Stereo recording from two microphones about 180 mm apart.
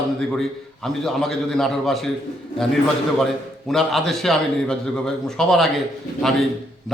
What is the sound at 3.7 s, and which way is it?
A man's voice, centre (ahead or behind).